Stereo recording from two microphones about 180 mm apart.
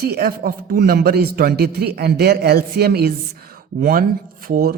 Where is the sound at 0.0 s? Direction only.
60° right (ahead or behind).